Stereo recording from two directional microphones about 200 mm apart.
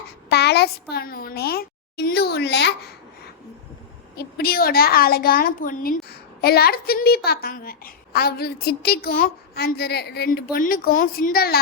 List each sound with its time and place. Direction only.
0.3 s a child's voice: 55° left (ahead or behind)
4.1 s a woman's voice: 50° left (ahead or behind)